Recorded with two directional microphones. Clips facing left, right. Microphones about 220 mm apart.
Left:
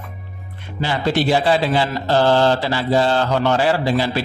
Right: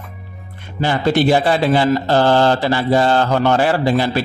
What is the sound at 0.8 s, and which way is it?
A man's voice, 50° right (ahead or behind).